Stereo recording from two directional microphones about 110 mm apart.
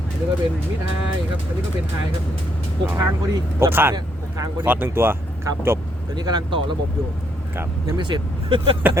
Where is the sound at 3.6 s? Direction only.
20° right (ahead or behind).